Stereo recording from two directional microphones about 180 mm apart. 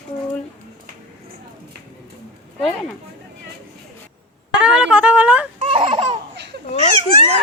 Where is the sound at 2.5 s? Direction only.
Centre (ahead or behind).